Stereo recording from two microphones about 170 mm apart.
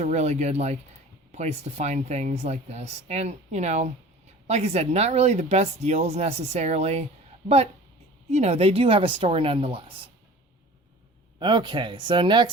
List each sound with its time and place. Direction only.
0.0 s speech: 40° right (ahead or behind)
11.3 s speech: 25° right (ahead or behind)